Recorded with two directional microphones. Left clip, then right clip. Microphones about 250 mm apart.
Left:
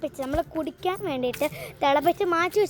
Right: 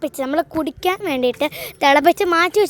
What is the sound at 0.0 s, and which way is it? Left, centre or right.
Speech, right.